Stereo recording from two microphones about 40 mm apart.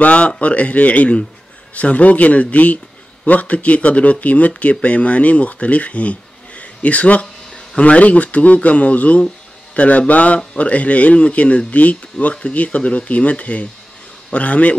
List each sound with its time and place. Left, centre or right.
0.0 s speech: left